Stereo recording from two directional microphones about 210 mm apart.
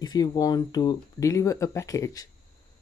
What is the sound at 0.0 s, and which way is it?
Speech, 20° left (ahead or behind).